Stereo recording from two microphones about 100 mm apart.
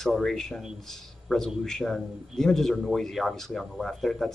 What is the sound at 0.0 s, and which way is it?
Speech, 5° left (ahead or behind).